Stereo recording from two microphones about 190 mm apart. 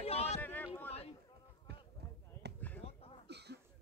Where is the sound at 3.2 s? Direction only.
60° right (ahead or behind).